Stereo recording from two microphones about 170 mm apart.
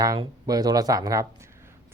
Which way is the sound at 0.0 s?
20° right (ahead or behind).